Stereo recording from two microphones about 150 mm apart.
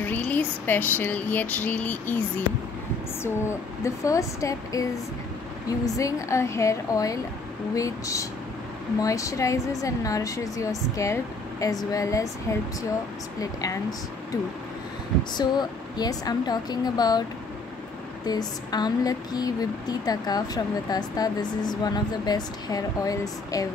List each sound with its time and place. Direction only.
0.0 s a sound: 10° left (ahead or behind)
3.3 s speech: 20° left (ahead or behind)
13.4 s speech: 25° left (ahead or behind)
15.3 s speech: 25° left (ahead or behind)
18.2 s speech: 25° left (ahead or behind)